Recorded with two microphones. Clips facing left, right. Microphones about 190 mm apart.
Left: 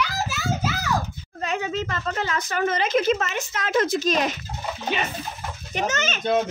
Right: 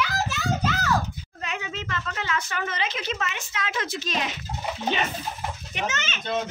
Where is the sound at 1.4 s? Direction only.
40° left (ahead or behind).